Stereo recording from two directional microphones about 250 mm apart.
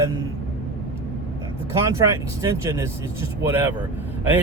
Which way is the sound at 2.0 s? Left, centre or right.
Centre.